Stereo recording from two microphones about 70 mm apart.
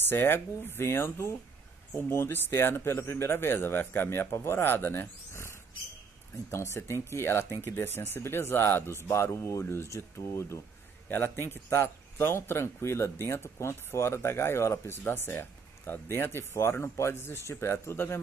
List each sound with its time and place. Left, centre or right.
0.1 s a man's voice: left